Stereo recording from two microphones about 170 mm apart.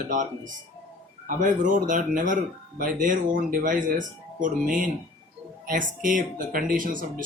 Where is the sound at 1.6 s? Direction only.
50° right (ahead or behind).